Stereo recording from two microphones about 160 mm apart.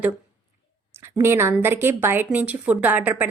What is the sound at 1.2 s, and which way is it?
A woman's voice, 15° right (ahead or behind).